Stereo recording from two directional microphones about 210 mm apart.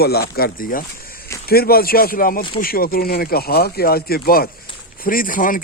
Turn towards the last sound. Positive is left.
turn(degrees=40)  # may be behind; listen again after turning